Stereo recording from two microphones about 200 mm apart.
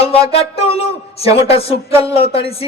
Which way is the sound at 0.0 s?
30° left (ahead or behind).